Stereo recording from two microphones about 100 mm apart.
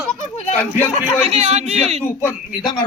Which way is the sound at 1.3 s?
90° right.